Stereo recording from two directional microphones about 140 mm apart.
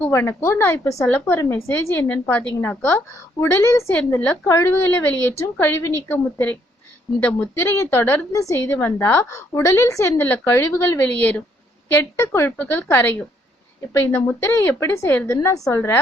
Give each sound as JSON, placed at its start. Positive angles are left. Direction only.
{"t": 0.0, "sound": "a woman's voice", "side_deg": 15}